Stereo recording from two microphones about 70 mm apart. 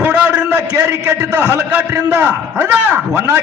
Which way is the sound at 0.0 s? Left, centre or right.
Right.